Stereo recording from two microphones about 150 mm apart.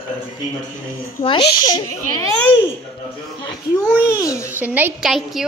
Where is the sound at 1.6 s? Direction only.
25° left (ahead or behind).